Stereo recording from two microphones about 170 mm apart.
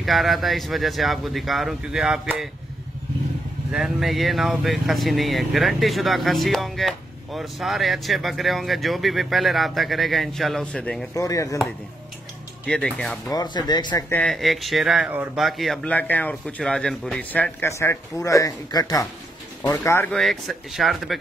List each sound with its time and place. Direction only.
0.0 s speech: centre (ahead or behind)
3.7 s speech: centre (ahead or behind)
11.1 s speech: 20° left (ahead or behind)
12.6 s speech: 5° left (ahead or behind)
13.3 s speech: 25° left (ahead or behind)
14.0 s speech: 5° left (ahead or behind)
20.1 s speech: centre (ahead or behind)